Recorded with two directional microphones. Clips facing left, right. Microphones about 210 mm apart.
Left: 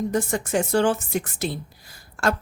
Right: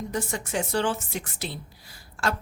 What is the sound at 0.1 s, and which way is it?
A woman's voice, 50° left (ahead or behind).